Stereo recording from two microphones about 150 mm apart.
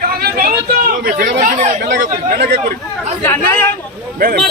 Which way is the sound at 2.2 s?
90° right.